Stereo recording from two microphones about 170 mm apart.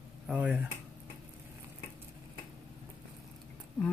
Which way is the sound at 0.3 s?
5° right (ahead or behind).